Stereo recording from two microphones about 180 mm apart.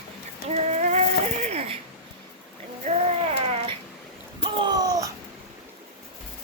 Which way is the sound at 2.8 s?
35° right (ahead or behind).